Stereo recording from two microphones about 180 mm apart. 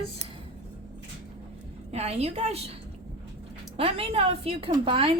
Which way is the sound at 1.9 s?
35° right (ahead or behind).